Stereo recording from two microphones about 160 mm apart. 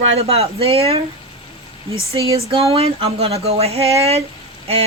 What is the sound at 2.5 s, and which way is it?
Speech, 40° right (ahead or behind).